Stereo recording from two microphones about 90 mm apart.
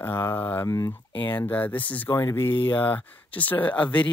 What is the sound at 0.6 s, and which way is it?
Speech, 35° left (ahead or behind).